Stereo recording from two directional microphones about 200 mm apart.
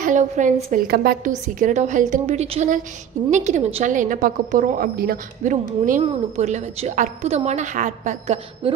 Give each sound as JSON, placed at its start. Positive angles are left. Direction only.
{"t": 0.0, "sound": "a woman's voice", "side_deg": -40}
{"t": 1.6, "sound": "a woman's voice", "side_deg": -35}